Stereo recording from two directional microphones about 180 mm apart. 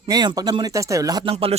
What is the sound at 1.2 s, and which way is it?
Speech, 30° right (ahead or behind).